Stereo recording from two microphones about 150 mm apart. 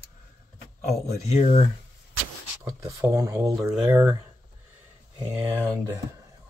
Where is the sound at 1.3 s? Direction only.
45° left (ahead or behind).